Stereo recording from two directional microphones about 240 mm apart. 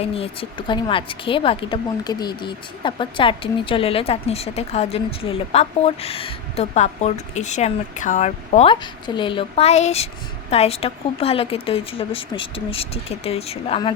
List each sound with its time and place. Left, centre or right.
0.0 s a woman's voice: left